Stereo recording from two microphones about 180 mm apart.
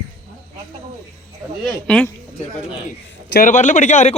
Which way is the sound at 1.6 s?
5° left (ahead or behind).